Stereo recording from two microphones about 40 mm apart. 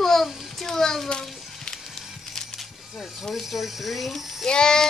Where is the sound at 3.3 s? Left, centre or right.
Centre.